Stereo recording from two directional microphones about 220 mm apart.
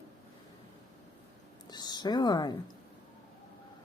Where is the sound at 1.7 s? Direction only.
20° left (ahead or behind).